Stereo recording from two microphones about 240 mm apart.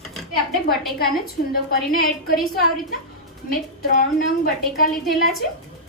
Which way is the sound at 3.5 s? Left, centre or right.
Left.